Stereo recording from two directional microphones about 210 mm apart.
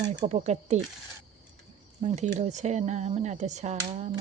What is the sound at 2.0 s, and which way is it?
Speech, 35° right (ahead or behind).